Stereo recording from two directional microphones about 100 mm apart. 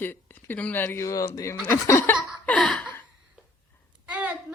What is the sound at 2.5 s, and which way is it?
Laughter, 10° left (ahead or behind).